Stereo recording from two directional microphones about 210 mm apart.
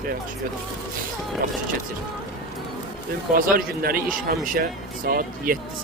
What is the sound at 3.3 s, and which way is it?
A man's voice, 40° right (ahead or behind).